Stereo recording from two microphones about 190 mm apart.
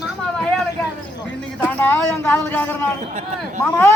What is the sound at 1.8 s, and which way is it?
Speech, 10° left (ahead or behind).